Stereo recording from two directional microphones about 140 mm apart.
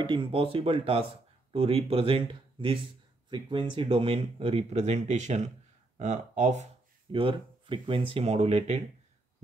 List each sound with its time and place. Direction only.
0.0 s speech: 35° right (ahead or behind); by 6.7 s 55° right (ahead or behind)
7.1 s speech: 40° right (ahead or behind)